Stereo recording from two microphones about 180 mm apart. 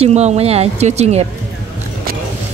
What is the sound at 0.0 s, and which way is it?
Speech, 35° right (ahead or behind).